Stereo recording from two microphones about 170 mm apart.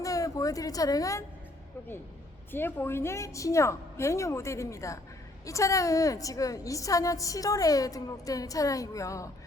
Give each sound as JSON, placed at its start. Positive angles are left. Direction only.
{"t": 0.0, "sound": "speech", "side_deg": 20}
{"t": 2.5, "sound": "a woman's voice", "side_deg": 10}